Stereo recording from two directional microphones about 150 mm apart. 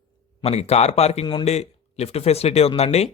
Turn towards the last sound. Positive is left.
turn(degrees=45)  # may be behind; listen again after turning